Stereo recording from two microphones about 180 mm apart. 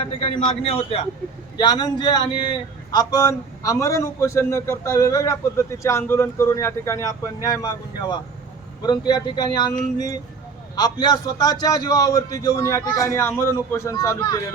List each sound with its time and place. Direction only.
0.0 s a man's voice: 30° left (ahead or behind)
10.8 s a man's voice: 20° left (ahead or behind)